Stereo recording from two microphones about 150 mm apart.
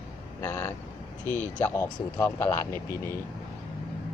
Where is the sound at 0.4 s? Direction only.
15° left (ahead or behind).